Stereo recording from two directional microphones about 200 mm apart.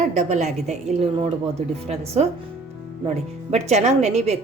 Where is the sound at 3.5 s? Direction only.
35° right (ahead or behind).